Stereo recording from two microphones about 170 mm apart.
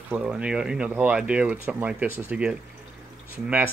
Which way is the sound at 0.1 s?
5° right (ahead or behind).